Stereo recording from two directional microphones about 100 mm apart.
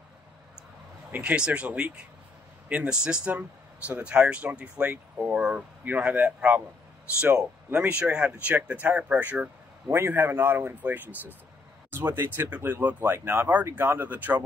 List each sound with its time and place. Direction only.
1.1 s speech: 10° right (ahead or behind)
9.8 s speech: 25° right (ahead or behind)